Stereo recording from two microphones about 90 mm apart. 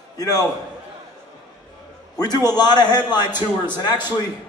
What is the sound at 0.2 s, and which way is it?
Speech, 40° left (ahead or behind).